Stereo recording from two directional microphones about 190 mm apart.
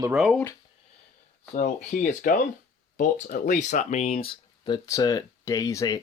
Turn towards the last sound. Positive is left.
turn(degrees=20)  # may be behind; listen again after turning